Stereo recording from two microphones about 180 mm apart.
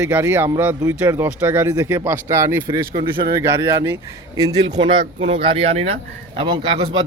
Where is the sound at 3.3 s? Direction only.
15° right (ahead or behind).